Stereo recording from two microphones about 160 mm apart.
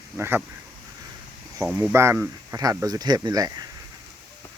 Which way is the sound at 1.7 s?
15° right (ahead or behind).